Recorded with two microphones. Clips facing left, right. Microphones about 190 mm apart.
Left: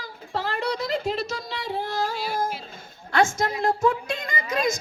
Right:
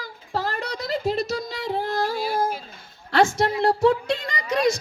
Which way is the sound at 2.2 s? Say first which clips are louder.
Right 4 dB; 50° right (ahead or behind).